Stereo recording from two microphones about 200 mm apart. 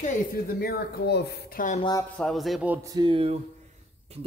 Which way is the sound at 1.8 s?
20° left (ahead or behind).